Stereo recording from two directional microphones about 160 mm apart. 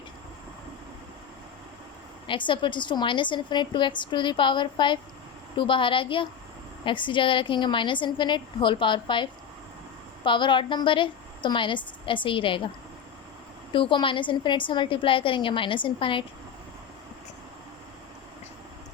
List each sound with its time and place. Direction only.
2.2 s a woman's voice: 30° left (ahead or behind)
13.7 s a woman's voice: 30° left (ahead or behind)